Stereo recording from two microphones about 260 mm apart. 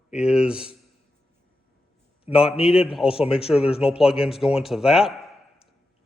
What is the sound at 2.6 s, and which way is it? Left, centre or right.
Speech, centre.